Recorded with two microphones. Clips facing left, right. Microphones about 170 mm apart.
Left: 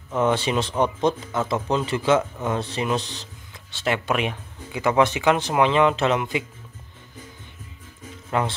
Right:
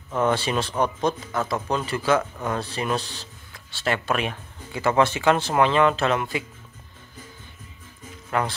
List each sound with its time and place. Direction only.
0.1 s speech: 20° left (ahead or behind)
8.3 s speech: 20° left (ahead or behind)